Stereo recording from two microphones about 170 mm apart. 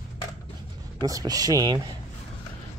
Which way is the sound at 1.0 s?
20° right (ahead or behind).